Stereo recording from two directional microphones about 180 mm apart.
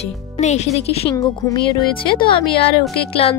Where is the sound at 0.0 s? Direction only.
40° left (ahead or behind).